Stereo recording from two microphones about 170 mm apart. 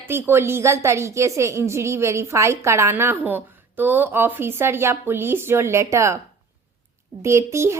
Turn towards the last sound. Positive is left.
turn(degrees=-15)  # may be behind; listen again after turning